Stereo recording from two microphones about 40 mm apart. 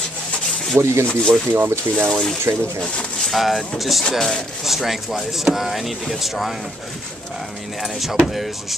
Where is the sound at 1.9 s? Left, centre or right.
Right.